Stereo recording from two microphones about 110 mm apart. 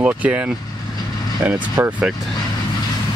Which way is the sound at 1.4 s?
25° right (ahead or behind).